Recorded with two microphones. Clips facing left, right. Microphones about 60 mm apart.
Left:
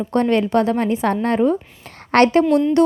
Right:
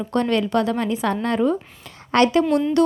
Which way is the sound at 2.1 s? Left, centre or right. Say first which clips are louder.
Left 3 dB; left.